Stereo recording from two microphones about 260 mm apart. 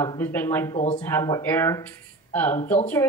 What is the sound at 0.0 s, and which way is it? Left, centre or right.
Speech, centre.